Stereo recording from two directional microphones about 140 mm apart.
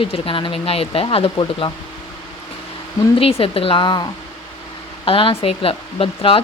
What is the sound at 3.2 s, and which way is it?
Speech, 40° left (ahead or behind).